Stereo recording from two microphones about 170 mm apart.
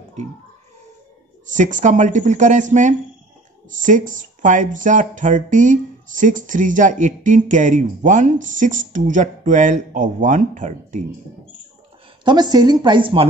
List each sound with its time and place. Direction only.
1.5 s speech: 50° right (ahead or behind)
12.3 s speech: 25° right (ahead or behind)